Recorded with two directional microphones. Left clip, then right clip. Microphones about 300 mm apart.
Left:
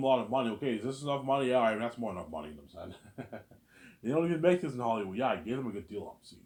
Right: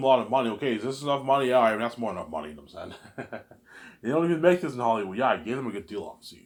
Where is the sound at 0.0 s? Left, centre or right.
Centre.